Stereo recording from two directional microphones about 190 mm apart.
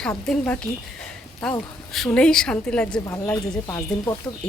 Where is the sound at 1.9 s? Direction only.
5° left (ahead or behind).